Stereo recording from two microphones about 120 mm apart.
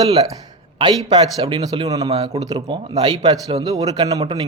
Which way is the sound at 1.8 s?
30° right (ahead or behind).